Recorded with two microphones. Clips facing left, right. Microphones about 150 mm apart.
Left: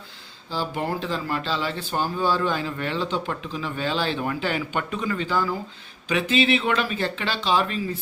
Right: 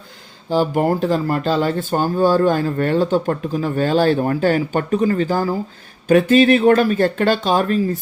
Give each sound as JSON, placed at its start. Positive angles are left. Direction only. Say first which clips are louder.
{"t": 0.7, "sound": "speech", "louder": "right 10 dB", "side_deg": -45}